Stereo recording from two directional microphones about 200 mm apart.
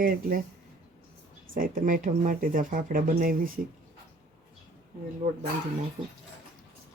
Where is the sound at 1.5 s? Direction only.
45° right (ahead or behind).